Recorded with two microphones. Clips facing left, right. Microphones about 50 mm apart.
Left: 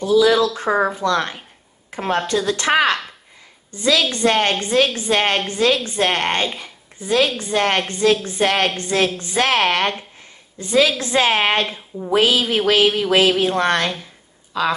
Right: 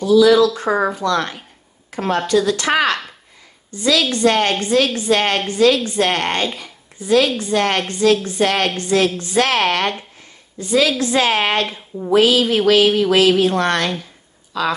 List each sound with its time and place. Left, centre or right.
0.0 s a woman's voice: left
11.6 s speech: centre
12.1 s a woman's voice: left